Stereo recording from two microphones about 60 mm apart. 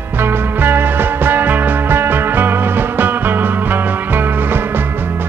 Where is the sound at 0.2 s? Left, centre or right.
Right.